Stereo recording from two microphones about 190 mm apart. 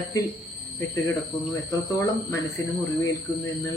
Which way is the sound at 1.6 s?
15° left (ahead or behind).